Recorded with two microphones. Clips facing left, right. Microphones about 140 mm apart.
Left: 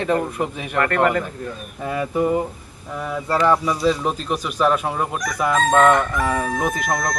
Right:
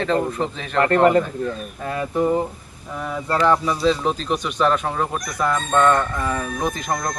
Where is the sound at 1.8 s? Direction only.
5° left (ahead or behind).